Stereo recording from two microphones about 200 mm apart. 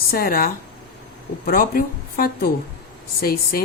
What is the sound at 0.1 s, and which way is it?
A woman's voice, 45° left (ahead or behind).